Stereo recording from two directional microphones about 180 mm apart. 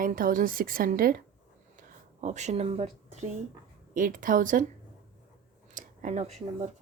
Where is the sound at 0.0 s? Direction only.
50° right (ahead or behind).